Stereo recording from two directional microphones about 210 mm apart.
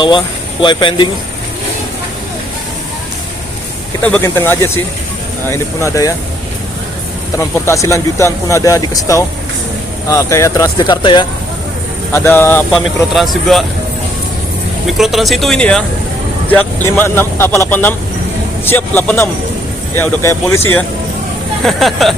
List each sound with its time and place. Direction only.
0.6 s speech: 20° left (ahead or behind)
4.0 s speech: 10° left (ahead or behind)
7.3 s speech: 15° left (ahead or behind)
12.1 s speech: 10° left (ahead or behind)
12.7 s speech: centre (ahead or behind)
14.8 s speech: centre (ahead or behind)